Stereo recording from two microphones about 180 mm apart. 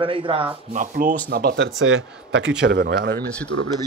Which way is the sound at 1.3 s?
60° right (ahead or behind).